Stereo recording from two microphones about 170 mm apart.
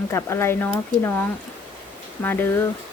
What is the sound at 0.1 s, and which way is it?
Speech, 15° left (ahead or behind).